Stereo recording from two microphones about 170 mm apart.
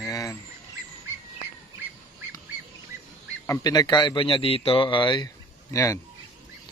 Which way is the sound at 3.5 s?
20° left (ahead or behind).